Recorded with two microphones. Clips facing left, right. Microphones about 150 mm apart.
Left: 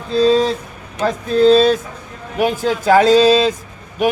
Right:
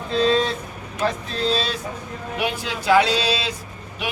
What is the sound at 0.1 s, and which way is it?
Speech, 35° left (ahead or behind).